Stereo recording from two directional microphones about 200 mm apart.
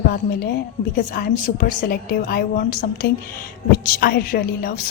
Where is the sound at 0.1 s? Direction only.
50° left (ahead or behind).